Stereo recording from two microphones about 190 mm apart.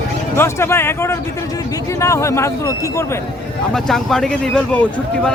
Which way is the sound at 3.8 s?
Centre (ahead or behind).